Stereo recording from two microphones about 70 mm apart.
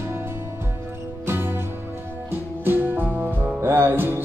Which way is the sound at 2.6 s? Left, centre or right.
Right.